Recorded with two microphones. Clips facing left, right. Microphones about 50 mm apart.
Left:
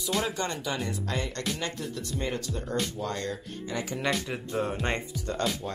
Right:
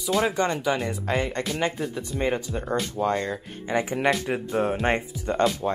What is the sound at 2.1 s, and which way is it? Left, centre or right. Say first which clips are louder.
Speech: right 7 dB; right.